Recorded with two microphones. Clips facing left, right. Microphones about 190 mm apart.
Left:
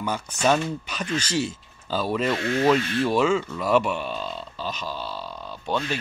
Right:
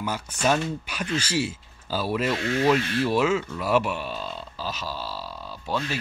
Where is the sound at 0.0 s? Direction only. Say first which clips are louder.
Left 2 dB; 5° right (ahead or behind).